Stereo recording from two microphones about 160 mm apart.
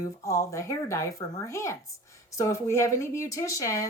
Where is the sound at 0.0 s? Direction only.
20° left (ahead or behind).